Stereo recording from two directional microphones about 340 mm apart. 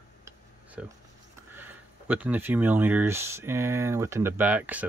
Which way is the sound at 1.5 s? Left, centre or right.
Centre.